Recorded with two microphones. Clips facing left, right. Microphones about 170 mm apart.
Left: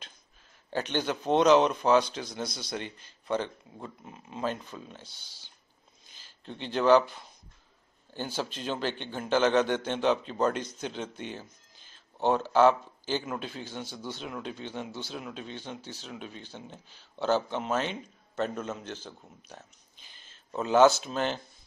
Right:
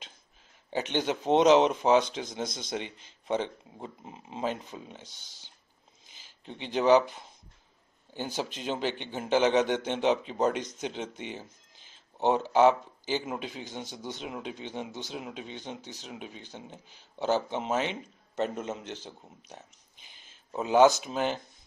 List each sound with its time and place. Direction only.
0.7 s speech: 20° right (ahead or behind)
20.5 s speech: 15° right (ahead or behind)